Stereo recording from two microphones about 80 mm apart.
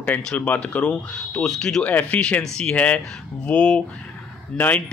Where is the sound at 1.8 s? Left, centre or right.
Centre.